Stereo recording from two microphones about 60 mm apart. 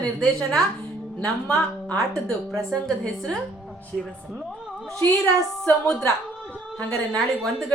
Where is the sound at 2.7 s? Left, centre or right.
Centre.